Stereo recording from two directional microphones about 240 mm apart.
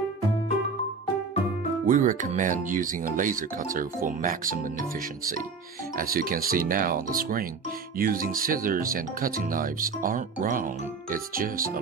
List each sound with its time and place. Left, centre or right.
1.9 s speech: right
5.9 s speech: right